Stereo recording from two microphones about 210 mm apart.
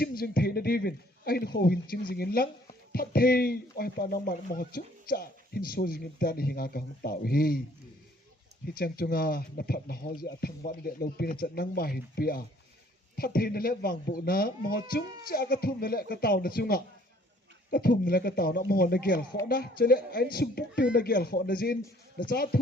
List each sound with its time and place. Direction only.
0.0 s a man's voice: 45° left (ahead or behind)
8.7 s speech: 45° left (ahead or behind)